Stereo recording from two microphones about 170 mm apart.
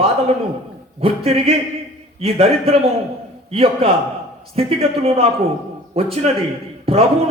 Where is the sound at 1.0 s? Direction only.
35° right (ahead or behind).